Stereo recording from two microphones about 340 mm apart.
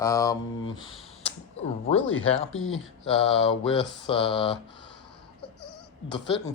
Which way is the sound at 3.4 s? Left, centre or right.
Centre.